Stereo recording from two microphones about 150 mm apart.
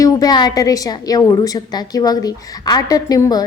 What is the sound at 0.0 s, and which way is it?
A woman's voice, 25° left (ahead or behind).